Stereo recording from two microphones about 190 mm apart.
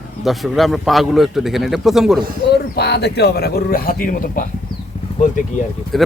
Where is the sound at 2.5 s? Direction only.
55° left (ahead or behind); by 5.6 s 40° left (ahead or behind).